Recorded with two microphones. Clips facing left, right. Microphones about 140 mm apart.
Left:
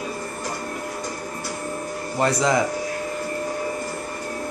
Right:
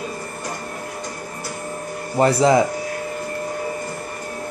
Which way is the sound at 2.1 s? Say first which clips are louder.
Right 5 dB; 25° right (ahead or behind).